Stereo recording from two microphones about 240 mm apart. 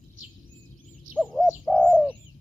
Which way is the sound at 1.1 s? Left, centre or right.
Centre.